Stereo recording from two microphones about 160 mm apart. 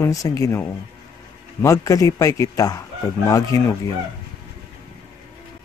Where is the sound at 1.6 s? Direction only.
20° left (ahead or behind).